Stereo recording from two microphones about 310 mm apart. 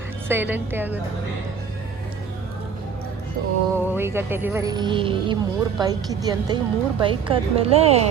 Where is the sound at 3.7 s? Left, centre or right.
Centre.